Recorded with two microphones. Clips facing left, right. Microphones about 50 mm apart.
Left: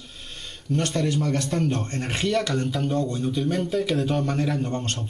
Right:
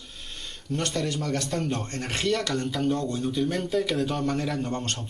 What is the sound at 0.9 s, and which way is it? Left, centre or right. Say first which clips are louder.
Speech: left 4 dB; centre.